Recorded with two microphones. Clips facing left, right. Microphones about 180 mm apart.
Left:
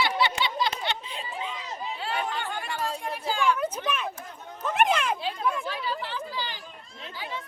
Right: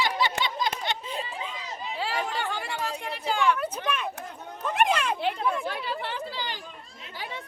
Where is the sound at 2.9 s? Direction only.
70° right (ahead or behind).